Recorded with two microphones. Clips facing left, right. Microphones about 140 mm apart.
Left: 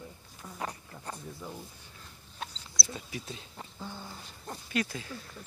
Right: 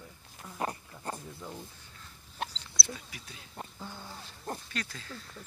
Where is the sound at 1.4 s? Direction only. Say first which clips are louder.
Left 1 dB; 5° left (ahead or behind).